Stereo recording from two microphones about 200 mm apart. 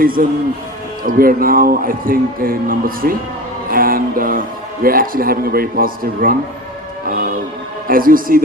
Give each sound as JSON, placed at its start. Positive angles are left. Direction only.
{"t": 0.0, "sound": "a man's voice", "side_deg": -45}
{"t": 7.1, "sound": "music", "side_deg": -45}
{"t": 7.9, "sound": "a man's voice", "side_deg": -45}